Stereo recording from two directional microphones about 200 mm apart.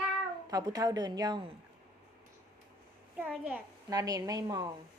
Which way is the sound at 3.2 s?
5° right (ahead or behind).